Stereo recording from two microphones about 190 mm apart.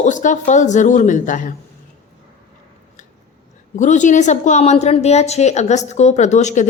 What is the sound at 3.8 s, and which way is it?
A woman's voice, 40° left (ahead or behind).